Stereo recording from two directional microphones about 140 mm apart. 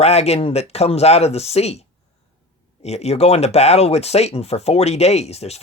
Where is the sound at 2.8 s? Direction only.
50° left (ahead or behind).